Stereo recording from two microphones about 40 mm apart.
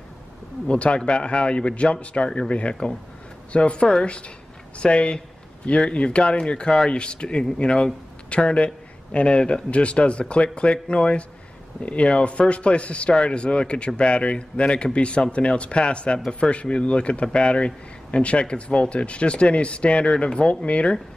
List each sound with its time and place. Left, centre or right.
0.7 s speech: left